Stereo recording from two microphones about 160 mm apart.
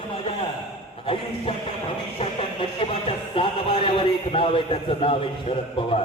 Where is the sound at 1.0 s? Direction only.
35° left (ahead or behind).